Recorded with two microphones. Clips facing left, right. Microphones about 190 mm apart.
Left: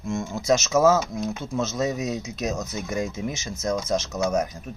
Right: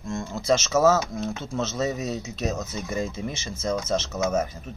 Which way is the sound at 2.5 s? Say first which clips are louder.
Left 1 dB; centre (ahead or behind).